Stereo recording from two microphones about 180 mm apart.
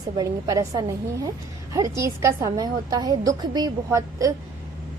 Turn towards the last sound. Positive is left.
turn(degrees=-20)  # may be behind; listen again after turning